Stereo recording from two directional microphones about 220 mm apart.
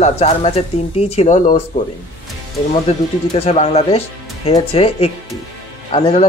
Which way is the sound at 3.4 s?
30° left (ahead or behind).